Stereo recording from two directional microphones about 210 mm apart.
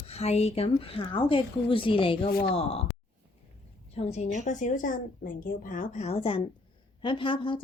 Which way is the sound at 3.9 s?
30° left (ahead or behind).